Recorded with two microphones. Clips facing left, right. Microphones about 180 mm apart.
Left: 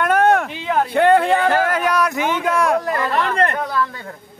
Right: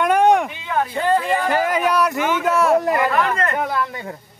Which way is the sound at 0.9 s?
65° left (ahead or behind).